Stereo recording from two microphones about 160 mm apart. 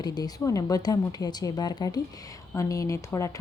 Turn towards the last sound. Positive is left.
turn(degrees=20)  # may be behind; listen again after turning